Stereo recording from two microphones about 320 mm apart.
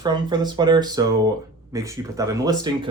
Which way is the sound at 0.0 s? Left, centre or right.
Centre.